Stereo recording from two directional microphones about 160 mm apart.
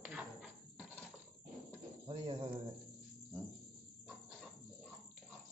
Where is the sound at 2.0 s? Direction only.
30° right (ahead or behind).